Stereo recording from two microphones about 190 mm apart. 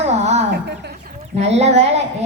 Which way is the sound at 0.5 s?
60° right (ahead or behind).